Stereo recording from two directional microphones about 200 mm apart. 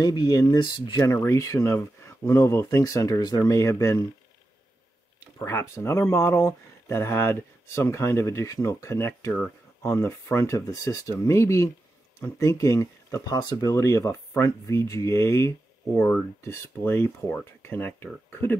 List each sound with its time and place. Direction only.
0.0 s speech: 20° left (ahead or behind)
5.4 s speech: 10° left (ahead or behind)